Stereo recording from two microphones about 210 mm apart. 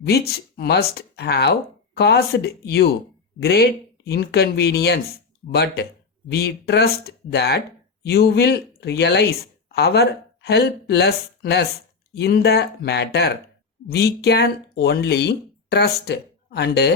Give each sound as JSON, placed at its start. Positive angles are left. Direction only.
{"t": 0.0, "sound": "speech", "side_deg": 50}